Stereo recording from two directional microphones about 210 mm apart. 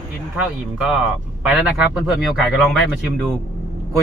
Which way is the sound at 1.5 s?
5° right (ahead or behind).